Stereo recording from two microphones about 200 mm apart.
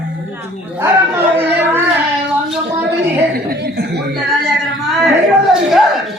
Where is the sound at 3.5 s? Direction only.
50° right (ahead or behind).